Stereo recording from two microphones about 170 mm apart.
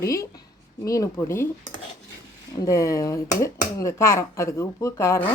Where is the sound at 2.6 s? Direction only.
20° left (ahead or behind).